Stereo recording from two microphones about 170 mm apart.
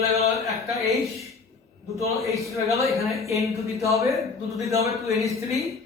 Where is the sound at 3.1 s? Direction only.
Centre (ahead or behind).